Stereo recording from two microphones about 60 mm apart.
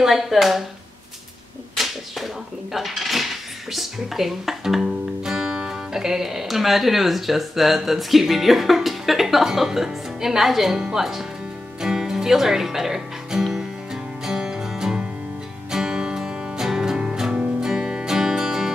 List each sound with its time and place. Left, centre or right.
0.0 s speech: centre
1.8 s speech: centre
11.8 s music: centre